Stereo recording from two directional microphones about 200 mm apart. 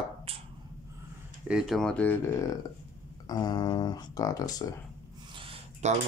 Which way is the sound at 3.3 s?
20° left (ahead or behind).